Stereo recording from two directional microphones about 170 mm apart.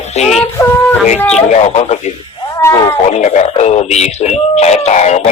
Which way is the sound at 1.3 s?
40° left (ahead or behind).